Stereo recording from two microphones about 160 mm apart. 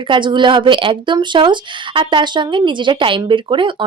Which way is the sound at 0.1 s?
30° right (ahead or behind).